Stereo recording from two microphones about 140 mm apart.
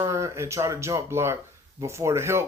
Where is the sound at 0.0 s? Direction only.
20° right (ahead or behind).